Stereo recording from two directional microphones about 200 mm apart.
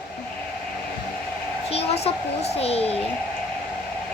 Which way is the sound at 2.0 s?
30° left (ahead or behind).